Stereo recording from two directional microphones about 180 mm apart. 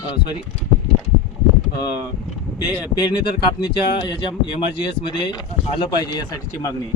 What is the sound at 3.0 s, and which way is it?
Speech, 25° left (ahead or behind).